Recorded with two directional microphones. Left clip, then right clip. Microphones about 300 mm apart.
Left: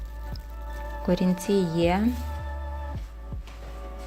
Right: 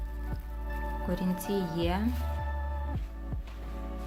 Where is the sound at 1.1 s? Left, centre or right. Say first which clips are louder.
Left 9 dB; centre.